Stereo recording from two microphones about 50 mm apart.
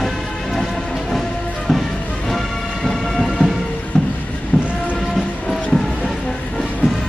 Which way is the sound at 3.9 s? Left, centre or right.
Left.